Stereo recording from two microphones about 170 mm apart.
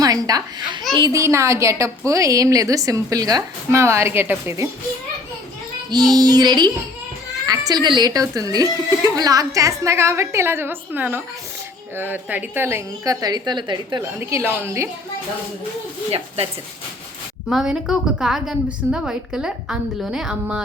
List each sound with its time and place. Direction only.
0.0 s a woman's voice: 20° right (ahead or behind)
5.9 s a woman's voice: 25° right (ahead or behind)
14.2 s a woman's voice: 15° right (ahead or behind)
17.5 s a woman's voice: centre (ahead or behind)